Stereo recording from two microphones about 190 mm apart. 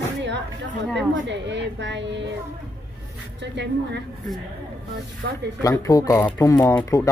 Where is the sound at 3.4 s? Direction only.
65° right (ahead or behind).